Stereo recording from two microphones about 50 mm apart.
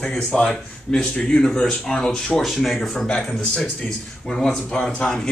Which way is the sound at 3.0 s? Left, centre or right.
Left.